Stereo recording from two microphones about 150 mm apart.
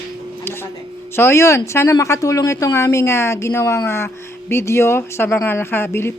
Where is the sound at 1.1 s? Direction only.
20° left (ahead or behind).